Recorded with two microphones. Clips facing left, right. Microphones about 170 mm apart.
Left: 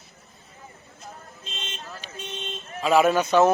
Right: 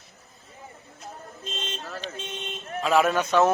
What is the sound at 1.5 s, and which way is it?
Vehicle, 40° right (ahead or behind).